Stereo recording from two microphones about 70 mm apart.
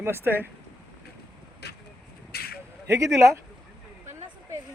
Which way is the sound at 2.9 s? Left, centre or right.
Right.